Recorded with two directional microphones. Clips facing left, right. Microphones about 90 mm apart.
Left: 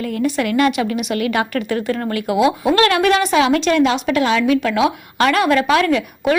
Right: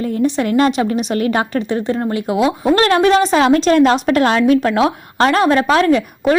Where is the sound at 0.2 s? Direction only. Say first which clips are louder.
Right 2 dB; 30° right (ahead or behind).